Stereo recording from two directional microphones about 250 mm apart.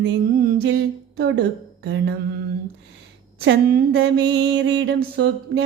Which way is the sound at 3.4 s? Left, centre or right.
Right.